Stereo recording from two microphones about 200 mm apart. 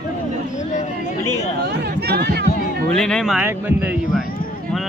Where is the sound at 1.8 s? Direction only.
55° right (ahead or behind).